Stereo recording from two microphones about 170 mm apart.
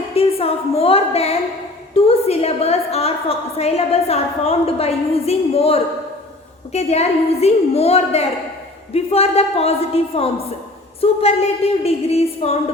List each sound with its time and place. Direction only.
0.1 s a woman's voice: 35° left (ahead or behind)